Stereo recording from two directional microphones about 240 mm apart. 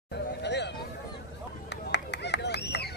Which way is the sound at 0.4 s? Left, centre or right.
Left.